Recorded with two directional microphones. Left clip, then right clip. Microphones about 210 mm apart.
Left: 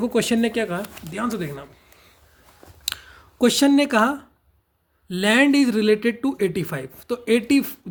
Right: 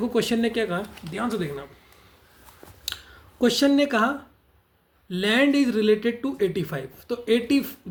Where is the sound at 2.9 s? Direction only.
40° left (ahead or behind).